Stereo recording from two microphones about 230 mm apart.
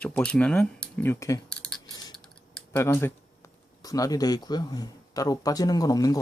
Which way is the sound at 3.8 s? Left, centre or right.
Centre.